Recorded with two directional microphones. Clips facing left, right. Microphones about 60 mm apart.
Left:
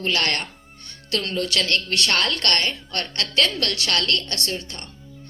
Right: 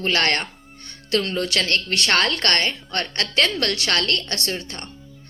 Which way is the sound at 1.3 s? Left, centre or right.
Right.